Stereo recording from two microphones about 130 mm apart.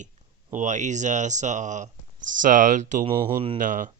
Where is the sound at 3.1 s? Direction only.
45° right (ahead or behind).